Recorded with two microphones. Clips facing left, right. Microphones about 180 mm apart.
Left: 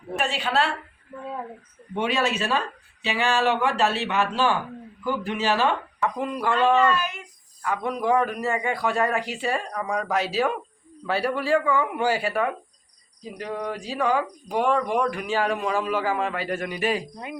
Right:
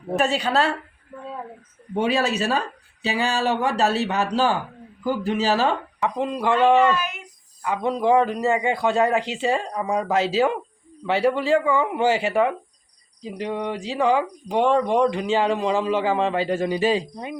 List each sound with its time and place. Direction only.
0.2 s speech: 40° right (ahead or behind)
2.0 s speech: 35° right (ahead or behind)
6.0 s speech: 25° right (ahead or behind)